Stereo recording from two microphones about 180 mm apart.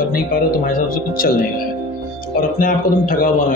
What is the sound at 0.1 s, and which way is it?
Speech, 50° left (ahead or behind).